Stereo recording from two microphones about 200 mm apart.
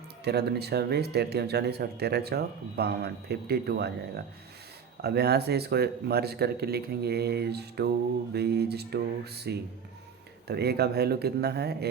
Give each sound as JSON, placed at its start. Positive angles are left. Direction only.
{"t": 0.3, "sound": "speech", "side_deg": -55}
{"t": 5.0, "sound": "speech", "side_deg": -55}